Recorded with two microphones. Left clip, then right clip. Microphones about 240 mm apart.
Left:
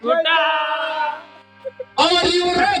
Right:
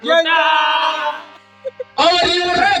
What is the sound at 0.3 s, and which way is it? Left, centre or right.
Male singing, centre.